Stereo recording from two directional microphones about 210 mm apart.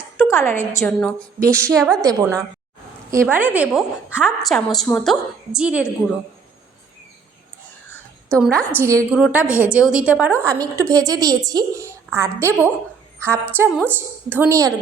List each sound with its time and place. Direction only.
0.3 s a woman's voice: 10° left (ahead or behind)
2.0 s a woman's voice: 15° right (ahead or behind)
6.0 s a woman's voice: 15° left (ahead or behind)
8.3 s a woman's voice: 5° left (ahead or behind); by 14.7 s 10° right (ahead or behind)